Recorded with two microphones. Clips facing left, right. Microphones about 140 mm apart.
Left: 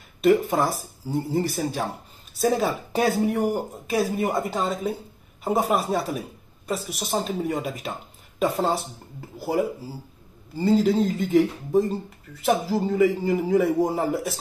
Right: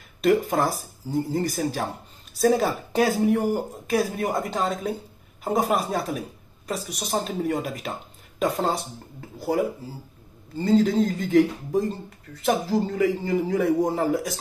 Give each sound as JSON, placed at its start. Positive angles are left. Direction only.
{"t": 0.2, "sound": "speech", "side_deg": 0}
{"t": 10.6, "sound": "speech", "side_deg": 5}